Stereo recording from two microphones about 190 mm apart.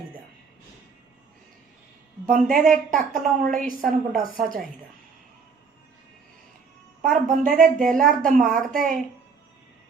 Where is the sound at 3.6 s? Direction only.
45° right (ahead or behind).